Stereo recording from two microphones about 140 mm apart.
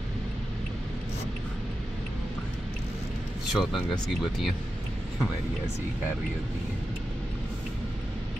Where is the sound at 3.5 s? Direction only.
Centre (ahead or behind).